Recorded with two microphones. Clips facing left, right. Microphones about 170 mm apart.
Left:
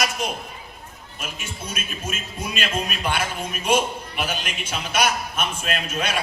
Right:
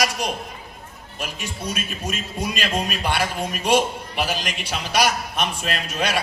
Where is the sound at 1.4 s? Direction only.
35° right (ahead or behind).